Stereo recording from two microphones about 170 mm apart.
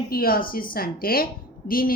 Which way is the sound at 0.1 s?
60° left (ahead or behind).